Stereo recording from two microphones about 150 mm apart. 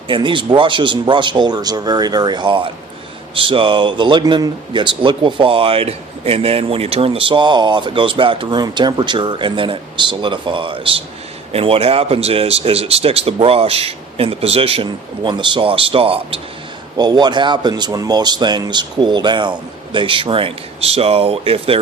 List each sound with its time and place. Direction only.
0.1 s speech: 35° right (ahead or behind)